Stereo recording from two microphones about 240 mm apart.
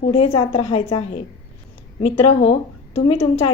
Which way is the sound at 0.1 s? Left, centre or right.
Left.